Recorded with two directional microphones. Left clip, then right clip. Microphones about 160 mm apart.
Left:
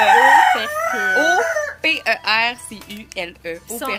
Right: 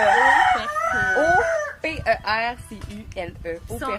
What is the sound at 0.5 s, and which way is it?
Speech, 30° left (ahead or behind).